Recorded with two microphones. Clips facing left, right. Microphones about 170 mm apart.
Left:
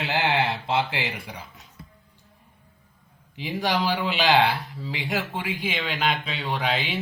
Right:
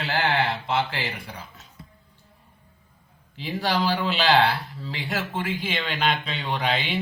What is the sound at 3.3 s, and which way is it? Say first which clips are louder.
Speech: even; 15° left (ahead or behind).